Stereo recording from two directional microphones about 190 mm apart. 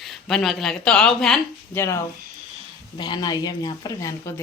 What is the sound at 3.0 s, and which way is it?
A woman's voice, 20° left (ahead or behind).